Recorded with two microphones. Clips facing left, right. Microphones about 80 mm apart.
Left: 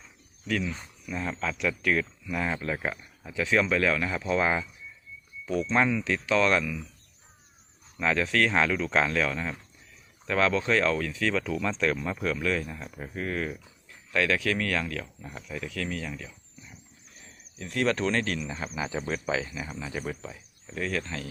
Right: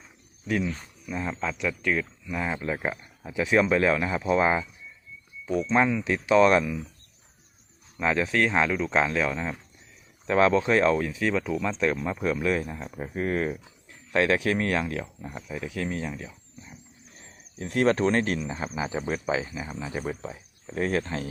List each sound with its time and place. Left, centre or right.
0.4 s speech: centre
7.9 s speech: centre
16.0 s a sound: right
17.2 s speech: right
18.4 s speech: centre
20.7 s speech: right